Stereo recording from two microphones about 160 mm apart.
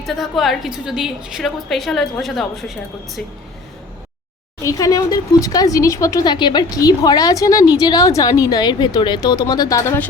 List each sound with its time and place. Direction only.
0.0 s a woman's voice: centre (ahead or behind)
4.6 s speech: 20° left (ahead or behind)